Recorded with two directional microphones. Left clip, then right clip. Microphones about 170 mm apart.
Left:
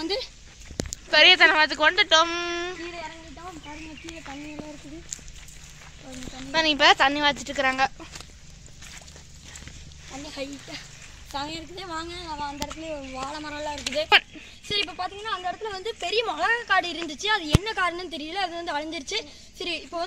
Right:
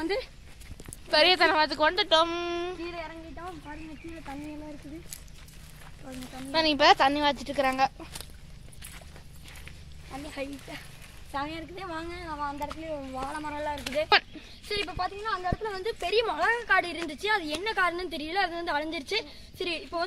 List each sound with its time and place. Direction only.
0.0 s speech: 5° left (ahead or behind)
6.3 s speech: centre (ahead or behind)
10.1 s speech: 5° right (ahead or behind)
14.0 s speech: centre (ahead or behind)